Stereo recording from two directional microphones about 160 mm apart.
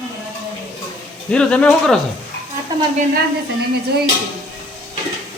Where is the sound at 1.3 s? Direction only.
5° left (ahead or behind).